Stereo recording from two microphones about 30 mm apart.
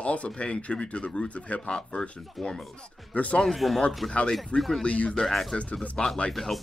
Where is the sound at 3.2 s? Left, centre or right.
Left.